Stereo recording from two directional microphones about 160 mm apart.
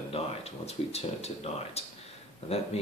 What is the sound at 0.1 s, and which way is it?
Speech, 40° left (ahead or behind).